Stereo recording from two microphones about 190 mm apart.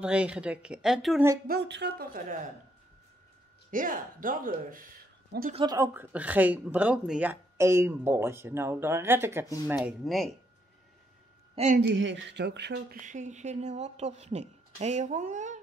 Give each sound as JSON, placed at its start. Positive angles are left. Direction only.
{"t": 0.0, "sound": "speech", "side_deg": -5}
{"t": 1.5, "sound": "speech", "side_deg": -60}
{"t": 3.7, "sound": "speech", "side_deg": -45}
{"t": 5.5, "sound": "speech", "side_deg": -25}
{"t": 5.8, "sound": "speech", "side_deg": -10}
{"t": 9.8, "sound": "speech", "side_deg": 0}
{"t": 11.5, "sound": "speech", "side_deg": -40}
{"t": 11.8, "sound": "speech", "side_deg": -70}
{"t": 13.0, "sound": "speech", "side_deg": -40}